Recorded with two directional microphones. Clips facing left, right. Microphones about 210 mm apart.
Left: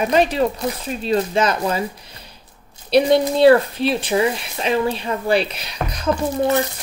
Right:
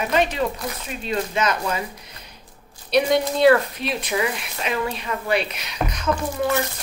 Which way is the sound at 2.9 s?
30° left (ahead or behind).